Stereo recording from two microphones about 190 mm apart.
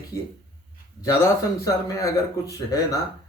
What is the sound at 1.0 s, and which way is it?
A man's voice, 15° left (ahead or behind).